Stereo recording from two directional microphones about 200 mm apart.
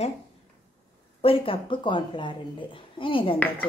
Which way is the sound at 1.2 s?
25° left (ahead or behind).